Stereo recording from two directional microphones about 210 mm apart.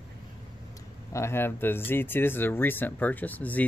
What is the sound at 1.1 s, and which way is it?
Speech, 10° left (ahead or behind).